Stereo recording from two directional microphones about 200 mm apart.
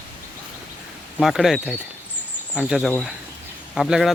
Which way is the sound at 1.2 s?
Centre (ahead or behind).